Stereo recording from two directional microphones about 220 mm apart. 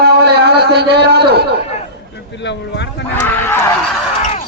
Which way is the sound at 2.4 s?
50° left (ahead or behind).